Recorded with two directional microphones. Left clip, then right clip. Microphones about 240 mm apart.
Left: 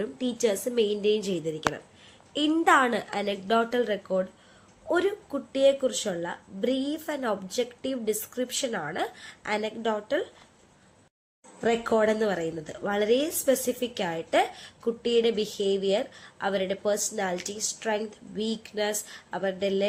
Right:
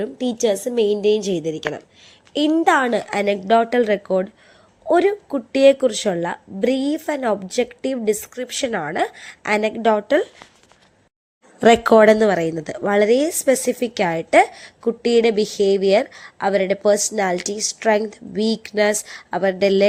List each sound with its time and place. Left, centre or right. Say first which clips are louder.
0.0 s speech: right 7 dB; right
11.6 s a woman's voice: right 13 dB; right